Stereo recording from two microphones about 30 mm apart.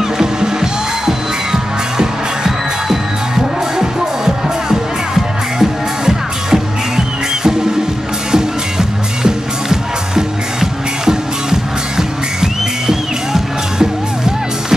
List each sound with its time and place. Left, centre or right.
0.2 s music: right